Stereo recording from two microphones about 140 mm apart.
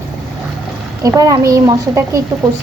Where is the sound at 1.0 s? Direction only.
25° right (ahead or behind).